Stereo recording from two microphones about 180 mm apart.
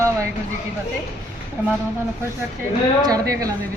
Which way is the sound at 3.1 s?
20° right (ahead or behind).